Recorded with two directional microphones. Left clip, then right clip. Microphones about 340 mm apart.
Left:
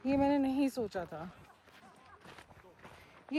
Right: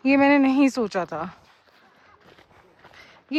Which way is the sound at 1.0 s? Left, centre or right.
Right.